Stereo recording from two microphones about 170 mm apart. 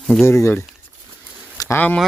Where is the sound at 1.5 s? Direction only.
20° left (ahead or behind).